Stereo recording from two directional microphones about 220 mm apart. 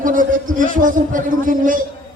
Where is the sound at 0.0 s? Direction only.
35° right (ahead or behind).